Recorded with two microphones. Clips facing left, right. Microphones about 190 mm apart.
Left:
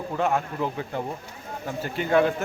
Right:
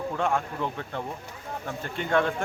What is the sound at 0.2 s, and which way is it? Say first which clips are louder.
A man's voice: left 4 dB; 5° left (ahead or behind).